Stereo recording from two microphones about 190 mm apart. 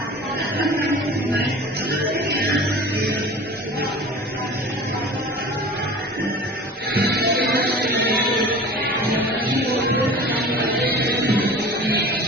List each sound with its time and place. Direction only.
1.9 s music: 55° right (ahead or behind)
6.9 s music: 55° right (ahead or behind)
9.5 s music: 55° right (ahead or behind)